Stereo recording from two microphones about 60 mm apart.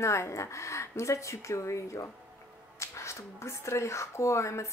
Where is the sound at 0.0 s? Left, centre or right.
Left.